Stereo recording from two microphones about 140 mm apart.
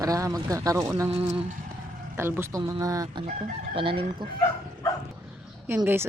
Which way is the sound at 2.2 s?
15° right (ahead or behind).